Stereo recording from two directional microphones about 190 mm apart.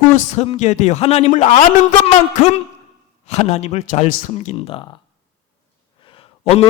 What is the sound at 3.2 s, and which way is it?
A man's voice, 35° left (ahead or behind).